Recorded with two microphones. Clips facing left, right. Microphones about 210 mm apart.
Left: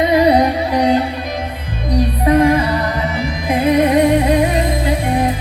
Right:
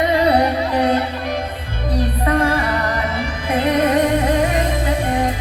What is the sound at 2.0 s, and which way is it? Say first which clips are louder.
Music: left 6 dB; 20° left (ahead or behind).